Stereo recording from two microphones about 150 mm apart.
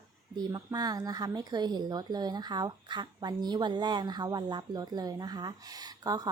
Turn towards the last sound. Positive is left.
turn(degrees=-25)  # may be behind; listen again after turning